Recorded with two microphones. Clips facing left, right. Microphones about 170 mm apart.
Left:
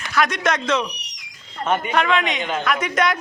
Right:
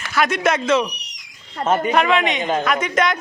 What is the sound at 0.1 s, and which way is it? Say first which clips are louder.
Speech: right 2 dB; 5° right (ahead or behind).